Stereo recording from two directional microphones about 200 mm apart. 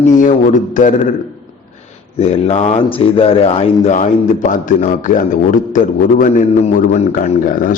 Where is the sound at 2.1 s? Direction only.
30° left (ahead or behind).